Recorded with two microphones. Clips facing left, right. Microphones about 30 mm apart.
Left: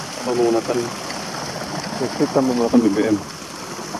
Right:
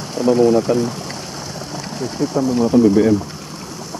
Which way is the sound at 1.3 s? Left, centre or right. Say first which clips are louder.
Left 2 dB; left.